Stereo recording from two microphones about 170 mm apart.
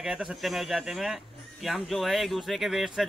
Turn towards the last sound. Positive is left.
turn(degrees=0)  # may be behind; listen again after turning